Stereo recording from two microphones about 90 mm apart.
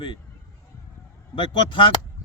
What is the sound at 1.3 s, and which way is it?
Speech, 65° left (ahead or behind).